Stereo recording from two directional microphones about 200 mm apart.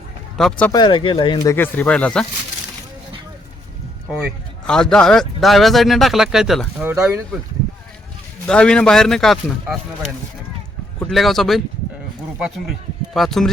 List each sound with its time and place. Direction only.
0.3 s speech: centre (ahead or behind)
0.7 s speech: 20° left (ahead or behind); by 2.2 s 5° left (ahead or behind)
4.1 s speech: centre (ahead or behind)
8.4 s speech: 5° left (ahead or behind)
11.0 s speech: centre (ahead or behind)
13.1 s speech: centre (ahead or behind)